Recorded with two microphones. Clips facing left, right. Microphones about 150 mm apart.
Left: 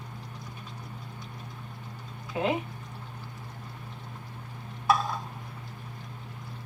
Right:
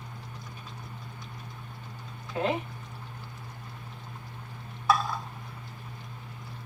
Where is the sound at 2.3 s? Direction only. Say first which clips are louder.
Even; 15° left (ahead or behind).